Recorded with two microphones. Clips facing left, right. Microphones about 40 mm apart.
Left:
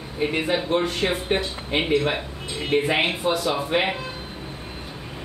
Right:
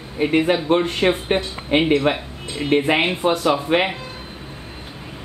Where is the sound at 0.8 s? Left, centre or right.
Right.